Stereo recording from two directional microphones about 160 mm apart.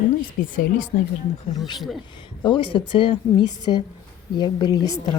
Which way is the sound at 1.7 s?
Centre (ahead or behind).